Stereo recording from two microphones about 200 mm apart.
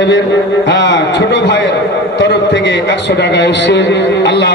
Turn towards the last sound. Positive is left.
turn(degrees=60)  # may be behind; listen again after turning